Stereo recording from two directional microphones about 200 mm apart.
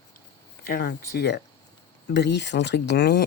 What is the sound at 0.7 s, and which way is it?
Speech, 55° left (ahead or behind).